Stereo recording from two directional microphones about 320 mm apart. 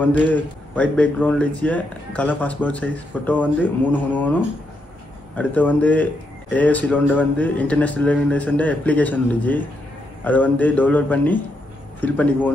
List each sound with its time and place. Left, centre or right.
0.0 s a man's voice: centre